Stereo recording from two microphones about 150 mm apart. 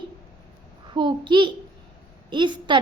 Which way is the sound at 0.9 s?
30° right (ahead or behind).